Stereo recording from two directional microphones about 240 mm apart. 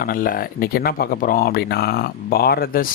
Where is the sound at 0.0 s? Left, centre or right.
Left.